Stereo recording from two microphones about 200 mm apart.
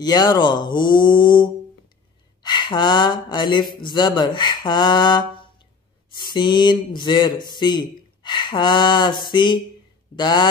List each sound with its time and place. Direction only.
0.0 s speech: 20° left (ahead or behind)